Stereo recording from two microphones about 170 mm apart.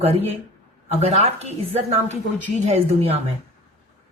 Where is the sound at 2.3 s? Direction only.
40° right (ahead or behind).